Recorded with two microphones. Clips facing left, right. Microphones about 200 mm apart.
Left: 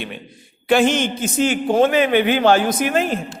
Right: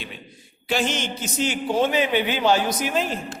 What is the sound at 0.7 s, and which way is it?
A man's voice, 55° left (ahead or behind).